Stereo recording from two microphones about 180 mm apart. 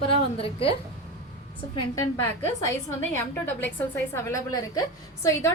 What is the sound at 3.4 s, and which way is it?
A woman's voice, 10° left (ahead or behind).